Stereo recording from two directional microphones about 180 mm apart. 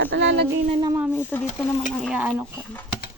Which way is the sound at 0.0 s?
80° right.